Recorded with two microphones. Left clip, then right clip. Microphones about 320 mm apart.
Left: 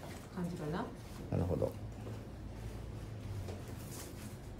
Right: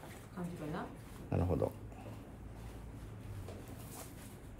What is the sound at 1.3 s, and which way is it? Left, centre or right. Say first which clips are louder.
Speech: right 1 dB; right.